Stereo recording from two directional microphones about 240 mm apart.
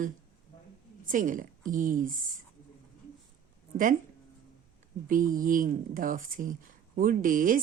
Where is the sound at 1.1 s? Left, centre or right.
Right.